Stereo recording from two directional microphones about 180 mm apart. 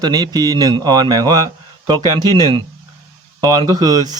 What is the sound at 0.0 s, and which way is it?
Speech, 20° right (ahead or behind).